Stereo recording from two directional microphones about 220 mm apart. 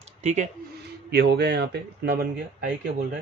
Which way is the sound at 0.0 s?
30° right (ahead or behind).